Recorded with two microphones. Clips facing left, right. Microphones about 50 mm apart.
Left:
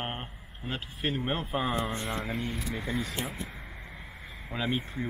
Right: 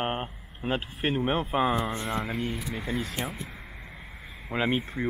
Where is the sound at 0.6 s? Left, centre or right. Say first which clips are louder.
Right 5 dB; right.